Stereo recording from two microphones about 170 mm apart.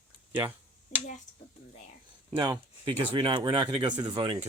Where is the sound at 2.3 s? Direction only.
25° right (ahead or behind).